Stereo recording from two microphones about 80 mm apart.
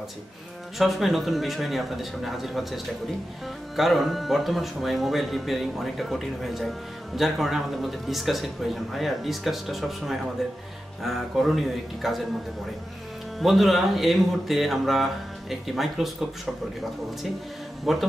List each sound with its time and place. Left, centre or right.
0.7 s speech: centre
13.4 s speech: centre
17.9 s speech: centre